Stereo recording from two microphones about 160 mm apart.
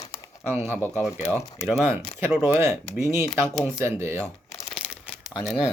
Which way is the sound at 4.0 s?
15° right (ahead or behind).